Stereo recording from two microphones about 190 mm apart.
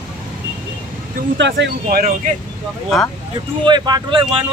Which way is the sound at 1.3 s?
70° right (ahead or behind).